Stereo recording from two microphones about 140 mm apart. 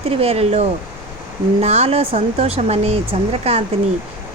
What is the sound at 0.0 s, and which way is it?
Speech, 45° right (ahead or behind).